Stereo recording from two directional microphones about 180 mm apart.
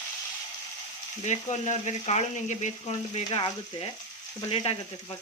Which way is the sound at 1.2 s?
40° left (ahead or behind).